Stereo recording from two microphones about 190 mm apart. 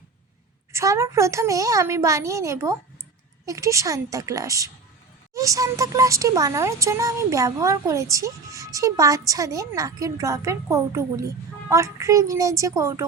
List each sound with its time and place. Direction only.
0.7 s a woman's voice: 15° right (ahead or behind)